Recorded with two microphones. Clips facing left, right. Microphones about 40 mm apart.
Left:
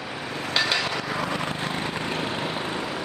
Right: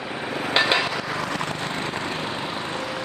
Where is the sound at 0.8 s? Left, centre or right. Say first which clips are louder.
Right 1 dB; centre.